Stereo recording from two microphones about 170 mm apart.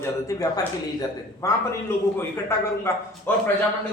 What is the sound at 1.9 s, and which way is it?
A man's voice, 15° left (ahead or behind).